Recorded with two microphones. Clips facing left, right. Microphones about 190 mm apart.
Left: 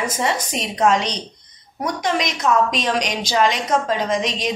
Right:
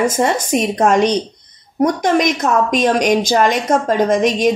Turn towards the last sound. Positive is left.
turn(degrees=-50)  # may be behind; listen again after turning